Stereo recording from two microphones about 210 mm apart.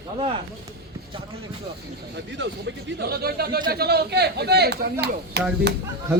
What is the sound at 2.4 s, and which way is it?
Speech, 50° right (ahead or behind).